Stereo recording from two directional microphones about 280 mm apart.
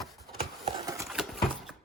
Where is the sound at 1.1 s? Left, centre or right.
Centre.